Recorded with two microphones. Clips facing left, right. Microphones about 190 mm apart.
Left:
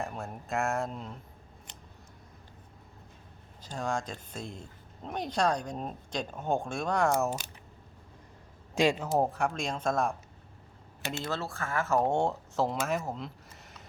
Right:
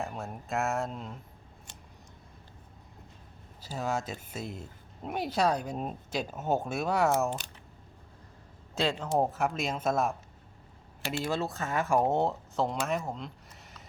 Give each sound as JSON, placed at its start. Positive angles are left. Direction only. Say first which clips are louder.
{"t": 0.0, "sound": "speech", "louder": "even", "side_deg": 0}
{"t": 3.6, "sound": "speech", "louder": "right 1 dB", "side_deg": -5}
{"t": 8.7, "sound": "speech", "louder": "left 2 dB", "side_deg": 10}
{"t": 11.2, "sound": "speech", "louder": "right 4 dB", "side_deg": -15}